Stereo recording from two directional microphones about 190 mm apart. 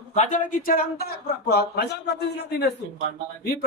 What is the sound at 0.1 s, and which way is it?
A man's voice, 40° left (ahead or behind).